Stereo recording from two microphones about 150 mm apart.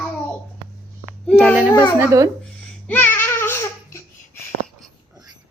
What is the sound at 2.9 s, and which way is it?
Babbling, 15° left (ahead or behind).